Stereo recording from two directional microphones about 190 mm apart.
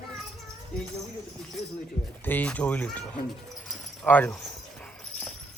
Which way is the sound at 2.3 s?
10° left (ahead or behind).